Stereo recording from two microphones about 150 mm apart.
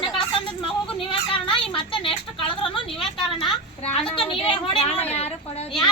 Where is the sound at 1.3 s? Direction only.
35° left (ahead or behind).